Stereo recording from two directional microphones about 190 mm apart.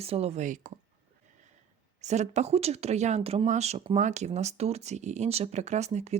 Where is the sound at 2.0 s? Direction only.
35° right (ahead or behind).